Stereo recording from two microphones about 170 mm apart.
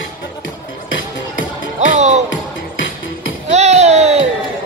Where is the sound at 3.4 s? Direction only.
40° right (ahead or behind).